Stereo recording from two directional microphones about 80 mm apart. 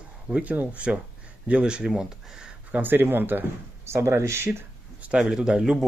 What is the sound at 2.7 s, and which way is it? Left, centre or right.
Speech, right.